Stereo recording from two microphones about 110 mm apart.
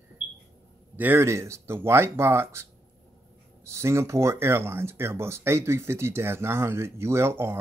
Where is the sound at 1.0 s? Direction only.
20° right (ahead or behind).